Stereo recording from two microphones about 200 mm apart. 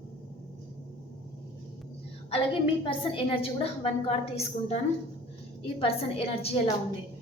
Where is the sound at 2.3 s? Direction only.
25° left (ahead or behind).